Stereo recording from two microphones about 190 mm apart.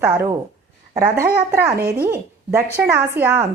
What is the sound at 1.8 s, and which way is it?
Speech, 55° right (ahead or behind).